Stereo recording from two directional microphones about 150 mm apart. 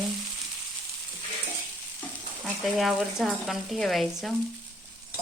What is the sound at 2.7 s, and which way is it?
Frying, centre (ahead or behind).